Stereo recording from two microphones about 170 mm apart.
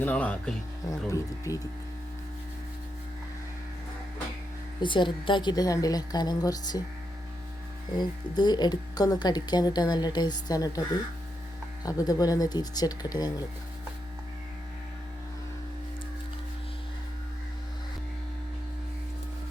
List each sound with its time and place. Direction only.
0.0 s speech: 10° left (ahead or behind)
0.9 s speech: 20° left (ahead or behind)
4.8 s speech: 25° left (ahead or behind)
7.9 s speech: 25° left (ahead or behind)
11.9 s speech: 20° left (ahead or behind)